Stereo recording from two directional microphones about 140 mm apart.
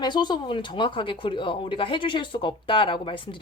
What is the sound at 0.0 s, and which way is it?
Speech, 30° left (ahead or behind).